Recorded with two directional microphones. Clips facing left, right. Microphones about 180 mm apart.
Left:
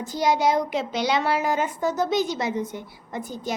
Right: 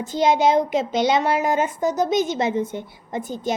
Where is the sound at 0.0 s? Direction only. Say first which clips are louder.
Right 4 dB; 25° right (ahead or behind).